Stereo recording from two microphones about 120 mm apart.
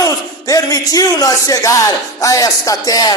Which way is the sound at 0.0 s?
30° left (ahead or behind).